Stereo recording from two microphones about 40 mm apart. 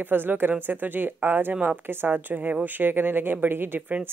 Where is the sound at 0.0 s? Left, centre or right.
Right.